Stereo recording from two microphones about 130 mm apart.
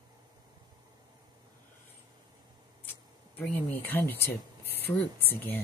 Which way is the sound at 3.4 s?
15° left (ahead or behind).